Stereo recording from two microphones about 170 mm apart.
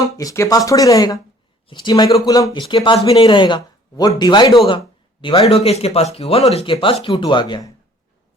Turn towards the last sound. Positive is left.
turn(degrees=25)  # may be behind; listen again after turning